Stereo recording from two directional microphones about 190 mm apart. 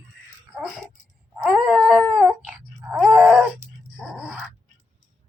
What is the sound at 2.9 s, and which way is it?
Groan, centre (ahead or behind).